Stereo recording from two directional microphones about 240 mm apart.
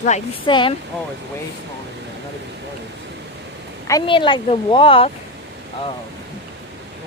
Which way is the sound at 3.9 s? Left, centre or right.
Centre.